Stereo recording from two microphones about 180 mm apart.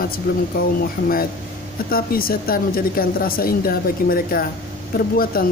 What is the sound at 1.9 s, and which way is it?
Speech, 55° left (ahead or behind).